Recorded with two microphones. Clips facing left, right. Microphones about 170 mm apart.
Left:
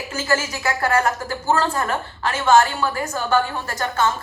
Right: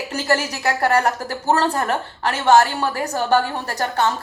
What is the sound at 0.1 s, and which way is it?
Speech, 65° right (ahead or behind).